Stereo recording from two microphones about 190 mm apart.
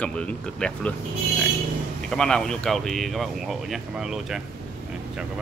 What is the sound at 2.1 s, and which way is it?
Speech, 5° left (ahead or behind).